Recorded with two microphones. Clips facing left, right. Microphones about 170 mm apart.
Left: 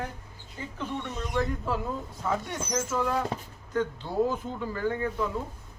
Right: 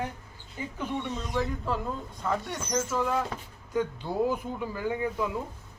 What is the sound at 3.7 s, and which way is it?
Speech, 10° right (ahead or behind).